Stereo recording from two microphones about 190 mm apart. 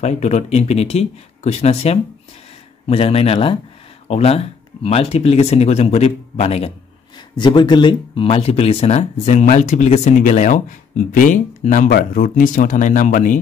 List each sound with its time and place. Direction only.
0.0 s speech: 35° left (ahead or behind)